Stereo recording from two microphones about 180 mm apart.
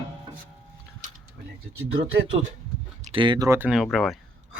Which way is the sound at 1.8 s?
90° right.